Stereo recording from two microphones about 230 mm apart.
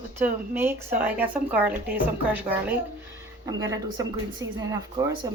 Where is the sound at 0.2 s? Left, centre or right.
Centre.